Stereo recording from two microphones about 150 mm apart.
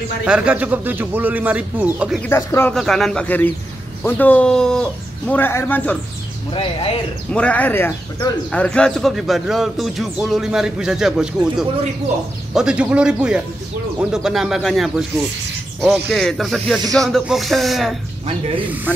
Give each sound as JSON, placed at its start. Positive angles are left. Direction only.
{"t": 0.3, "sound": "speech", "side_deg": -5}
{"t": 2.2, "sound": "speech", "side_deg": 15}
{"t": 2.7, "sound": "a man's voice", "side_deg": 0}
{"t": 5.3, "sound": "speech", "side_deg": 15}
{"t": 6.5, "sound": "speech", "side_deg": 35}
{"t": 7.3, "sound": "a man's voice", "side_deg": 10}